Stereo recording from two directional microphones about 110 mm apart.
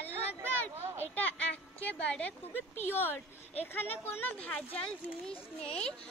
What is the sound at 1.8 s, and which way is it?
A woman's voice, 10° left (ahead or behind).